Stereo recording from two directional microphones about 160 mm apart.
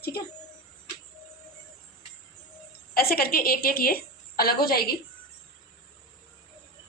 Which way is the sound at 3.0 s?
70° left (ahead or behind).